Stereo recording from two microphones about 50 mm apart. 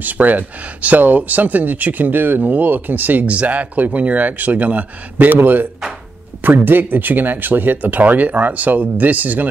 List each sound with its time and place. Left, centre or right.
0.0 s speech: right
3.3 s speech: right